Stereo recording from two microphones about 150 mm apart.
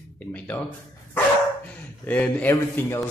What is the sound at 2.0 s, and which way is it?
A man's voice, 10° left (ahead or behind).